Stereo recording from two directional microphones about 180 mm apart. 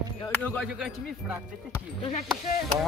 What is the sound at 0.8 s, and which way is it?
Speech, 5° right (ahead or behind).